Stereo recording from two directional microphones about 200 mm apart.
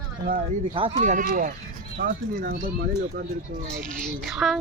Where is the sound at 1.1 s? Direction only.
40° right (ahead or behind).